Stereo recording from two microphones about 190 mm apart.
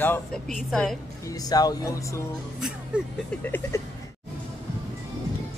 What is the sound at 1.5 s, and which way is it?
Speech, 20° left (ahead or behind).